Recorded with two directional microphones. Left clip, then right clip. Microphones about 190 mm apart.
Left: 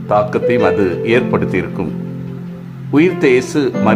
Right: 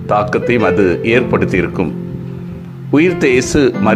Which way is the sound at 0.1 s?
15° right (ahead or behind).